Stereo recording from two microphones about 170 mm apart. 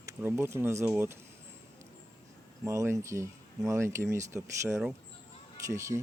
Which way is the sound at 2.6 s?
15° right (ahead or behind).